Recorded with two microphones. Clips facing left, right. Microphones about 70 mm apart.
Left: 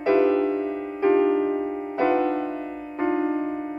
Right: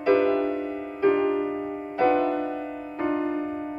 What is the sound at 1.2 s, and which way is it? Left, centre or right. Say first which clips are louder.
Music: left 4 dB; centre.